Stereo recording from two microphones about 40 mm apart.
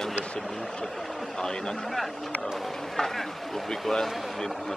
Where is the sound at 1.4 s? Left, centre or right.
Centre.